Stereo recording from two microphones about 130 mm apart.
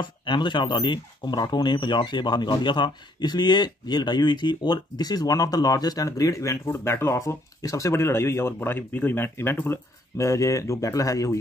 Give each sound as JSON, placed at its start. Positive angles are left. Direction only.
{"t": 0.0, "sound": "speech", "side_deg": 40}